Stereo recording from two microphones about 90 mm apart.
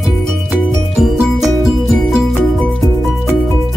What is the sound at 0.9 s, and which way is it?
Music, centre (ahead or behind).